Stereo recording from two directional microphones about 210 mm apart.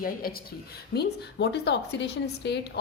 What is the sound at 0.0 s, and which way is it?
Speech, 45° left (ahead or behind).